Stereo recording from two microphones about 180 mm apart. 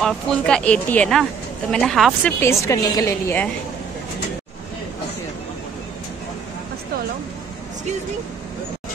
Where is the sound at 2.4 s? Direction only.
15° left (ahead or behind).